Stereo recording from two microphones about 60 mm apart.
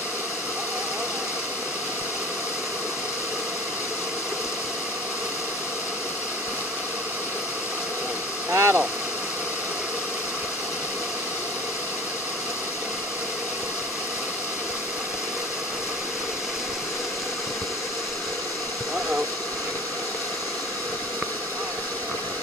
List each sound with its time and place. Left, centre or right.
8.5 s vehicle: right